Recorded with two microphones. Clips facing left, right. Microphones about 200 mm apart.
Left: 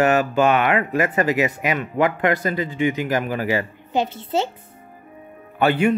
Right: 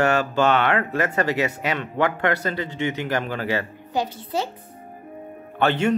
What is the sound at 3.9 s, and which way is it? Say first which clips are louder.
Speech: left 4 dB; 25° left (ahead or behind).